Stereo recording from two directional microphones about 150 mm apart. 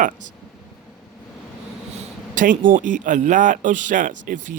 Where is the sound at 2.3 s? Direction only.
60° right (ahead or behind).